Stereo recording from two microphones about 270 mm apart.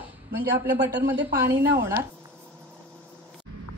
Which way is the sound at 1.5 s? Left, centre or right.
Right.